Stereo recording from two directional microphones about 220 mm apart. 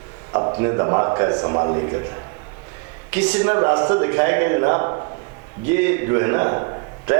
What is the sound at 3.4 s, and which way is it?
A man's voice, 20° right (ahead or behind).